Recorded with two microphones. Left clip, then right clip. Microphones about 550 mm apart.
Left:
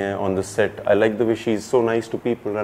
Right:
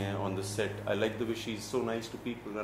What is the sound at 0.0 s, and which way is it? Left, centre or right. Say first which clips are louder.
Speech: left 13 dB; left.